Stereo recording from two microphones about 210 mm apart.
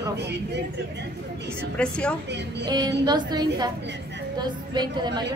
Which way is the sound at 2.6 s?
20° right (ahead or behind).